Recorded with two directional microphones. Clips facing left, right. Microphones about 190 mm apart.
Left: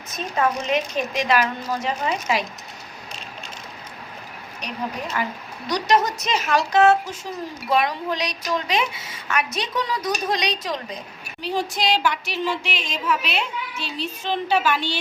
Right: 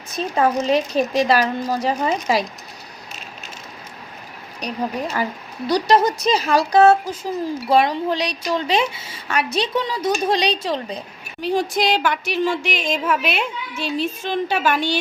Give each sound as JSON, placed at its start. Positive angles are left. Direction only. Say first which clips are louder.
{"t": 0.1, "sound": "a woman's voice", "louder": "right 4 dB", "side_deg": -35}
{"t": 5.6, "sound": "a woman's voice", "louder": "right 4 dB", "side_deg": -30}
{"t": 11.3, "sound": "a sound", "louder": "right 5 dB", "side_deg": -50}